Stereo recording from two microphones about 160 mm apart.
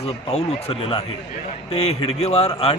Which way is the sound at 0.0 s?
40° left (ahead or behind).